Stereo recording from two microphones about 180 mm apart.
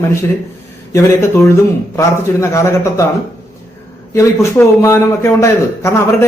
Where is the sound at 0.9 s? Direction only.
15° left (ahead or behind).